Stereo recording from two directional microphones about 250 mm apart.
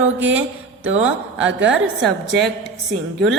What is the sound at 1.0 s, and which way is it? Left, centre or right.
Speech, centre.